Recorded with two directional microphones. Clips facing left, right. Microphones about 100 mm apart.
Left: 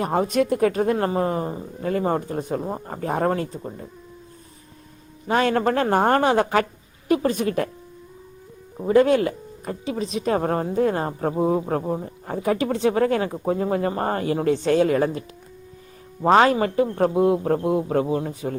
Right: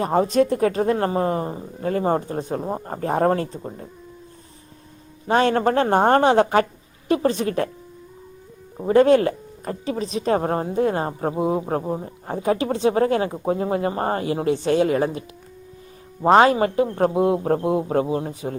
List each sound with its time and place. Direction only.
0.0 s speech: 30° right (ahead or behind)
5.3 s speech: 30° right (ahead or behind)
8.9 s speech: 35° right (ahead or behind)
11.3 s a man's voice: 15° right (ahead or behind)
12.0 s speech: 30° right (ahead or behind)
16.2 s speech: 25° right (ahead or behind)